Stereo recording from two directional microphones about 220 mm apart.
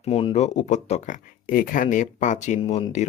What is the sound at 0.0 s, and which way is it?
Speech, 25° left (ahead or behind).